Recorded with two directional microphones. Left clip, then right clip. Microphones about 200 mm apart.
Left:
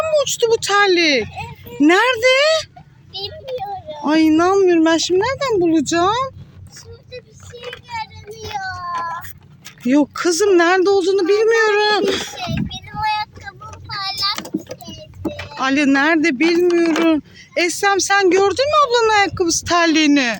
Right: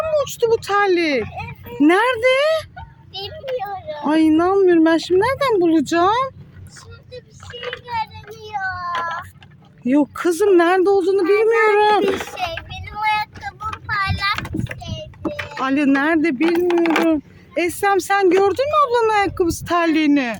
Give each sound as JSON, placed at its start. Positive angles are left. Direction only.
{"t": 0.1, "sound": "a child's voice", "side_deg": 0}
{"t": 8.3, "sound": "a sound", "side_deg": -10}
{"t": 9.8, "sound": "speech", "side_deg": 0}
{"t": 12.1, "sound": "child singing", "side_deg": 0}
{"t": 13.0, "sound": "child singing", "side_deg": -15}
{"t": 13.4, "sound": "a sound", "side_deg": -45}
{"t": 15.3, "sound": "speech", "side_deg": 0}